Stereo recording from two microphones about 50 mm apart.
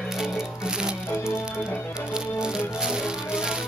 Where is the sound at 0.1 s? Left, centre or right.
Centre.